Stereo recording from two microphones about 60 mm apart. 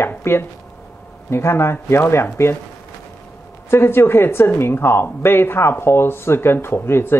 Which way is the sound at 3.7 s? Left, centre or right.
Left.